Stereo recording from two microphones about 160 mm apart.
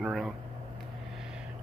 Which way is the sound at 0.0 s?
Centre (ahead or behind).